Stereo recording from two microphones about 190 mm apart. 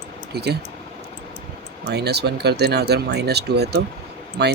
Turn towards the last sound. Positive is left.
turn(degrees=-60)  # may be behind; listen again after turning